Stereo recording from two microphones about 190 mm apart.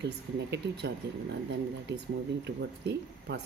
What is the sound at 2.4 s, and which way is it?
Speech, 65° right (ahead or behind).